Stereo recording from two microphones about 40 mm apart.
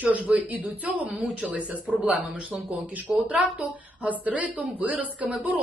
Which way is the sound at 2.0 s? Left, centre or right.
Right.